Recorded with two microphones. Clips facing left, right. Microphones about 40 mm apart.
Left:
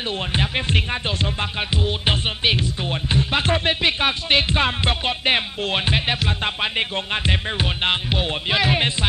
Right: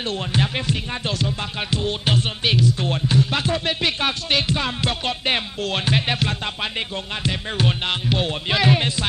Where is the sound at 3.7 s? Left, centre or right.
Left.